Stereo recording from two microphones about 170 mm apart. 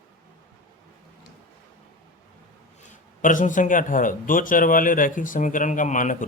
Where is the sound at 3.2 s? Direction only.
50° left (ahead or behind).